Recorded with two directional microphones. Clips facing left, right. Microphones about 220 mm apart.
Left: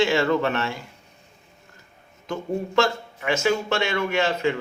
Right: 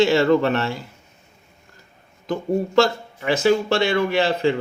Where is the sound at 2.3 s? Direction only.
35° right (ahead or behind).